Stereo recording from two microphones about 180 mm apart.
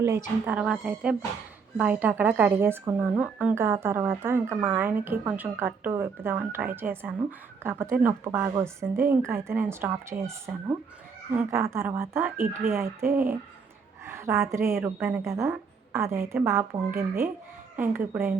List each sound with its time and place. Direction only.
0.0 s a woman's voice: 10° right (ahead or behind)